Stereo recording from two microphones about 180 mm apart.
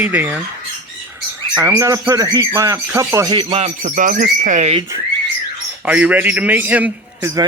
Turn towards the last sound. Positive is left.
turn(degrees=-15)  # may be behind; listen again after turning